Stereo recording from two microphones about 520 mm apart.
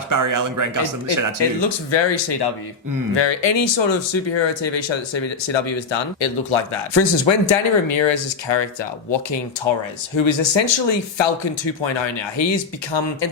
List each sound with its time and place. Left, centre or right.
0.1 s speech: right
1.9 s speech: left